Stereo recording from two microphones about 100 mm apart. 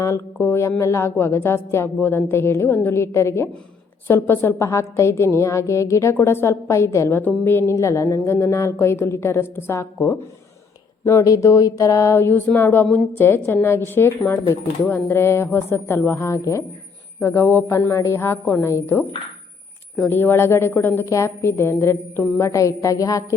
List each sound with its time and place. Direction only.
0.0 s a woman's voice: 25° left (ahead or behind)
20.1 s a woman's voice: 20° left (ahead or behind)